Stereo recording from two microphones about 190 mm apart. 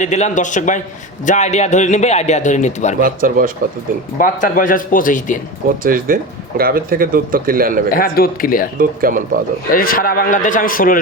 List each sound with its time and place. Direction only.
0.0 s a man's voice: 40° left (ahead or behind)
3.0 s speech: 50° right (ahead or behind)
4.2 s speech: 45° left (ahead or behind)
5.8 s speech: 50° right (ahead or behind)
7.9 s speech: 50° left (ahead or behind)
8.8 s speech: 50° right (ahead or behind)
9.7 s speech: 50° left (ahead or behind)